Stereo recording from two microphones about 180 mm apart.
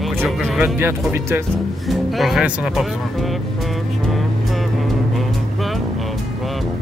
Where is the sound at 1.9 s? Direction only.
Centre (ahead or behind).